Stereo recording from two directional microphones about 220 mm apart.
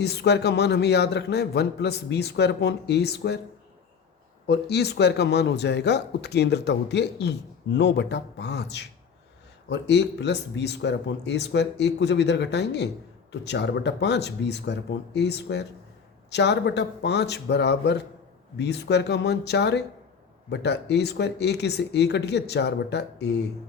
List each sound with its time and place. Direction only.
0.0 s speech: 50° left (ahead or behind)
4.4 s speech: 50° left (ahead or behind)